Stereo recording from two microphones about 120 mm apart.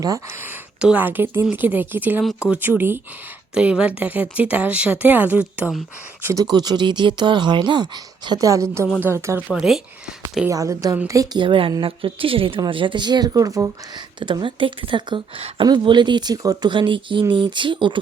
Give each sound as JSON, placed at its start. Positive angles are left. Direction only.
{"t": 0.3, "sound": "speech", "side_deg": -20}
{"t": 6.4, "sound": "a woman's voice", "side_deg": -35}
{"t": 9.5, "sound": "speech", "side_deg": -5}
{"t": 10.5, "sound": "a woman's voice", "side_deg": -30}
{"t": 11.3, "sound": "speech", "side_deg": -45}
{"t": 14.2, "sound": "speech", "side_deg": -40}